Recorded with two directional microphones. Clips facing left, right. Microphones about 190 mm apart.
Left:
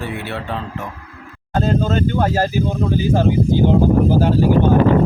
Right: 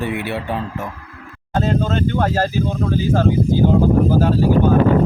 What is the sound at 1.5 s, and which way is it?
Speech, centre (ahead or behind).